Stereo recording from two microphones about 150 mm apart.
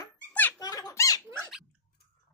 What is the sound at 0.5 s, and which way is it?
Speech, 25° left (ahead or behind).